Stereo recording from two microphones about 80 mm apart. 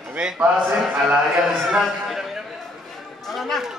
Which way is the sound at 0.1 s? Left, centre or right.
Centre.